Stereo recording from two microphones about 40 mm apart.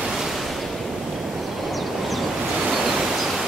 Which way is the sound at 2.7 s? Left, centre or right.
Centre.